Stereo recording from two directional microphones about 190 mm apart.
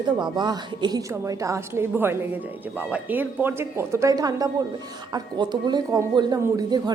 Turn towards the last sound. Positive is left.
turn(degrees=-20)  # may be behind; listen again after turning